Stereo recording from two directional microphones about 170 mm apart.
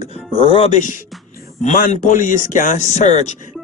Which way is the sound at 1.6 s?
45° left (ahead or behind).